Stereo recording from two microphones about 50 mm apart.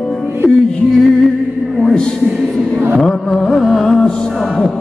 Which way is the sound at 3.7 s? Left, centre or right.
Centre.